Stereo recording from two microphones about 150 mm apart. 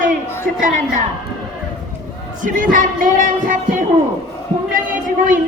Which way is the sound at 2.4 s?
60° right (ahead or behind).